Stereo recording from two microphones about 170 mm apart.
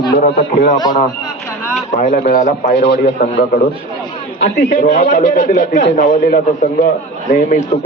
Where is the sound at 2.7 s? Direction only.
90° left.